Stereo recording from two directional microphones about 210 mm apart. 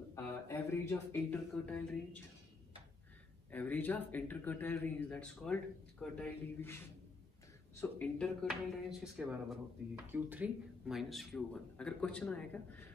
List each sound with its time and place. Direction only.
0.1 s speech: 15° left (ahead or behind)
3.5 s speech: 10° left (ahead or behind)